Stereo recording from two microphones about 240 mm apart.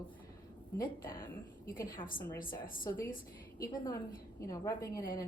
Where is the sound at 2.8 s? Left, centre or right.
Centre.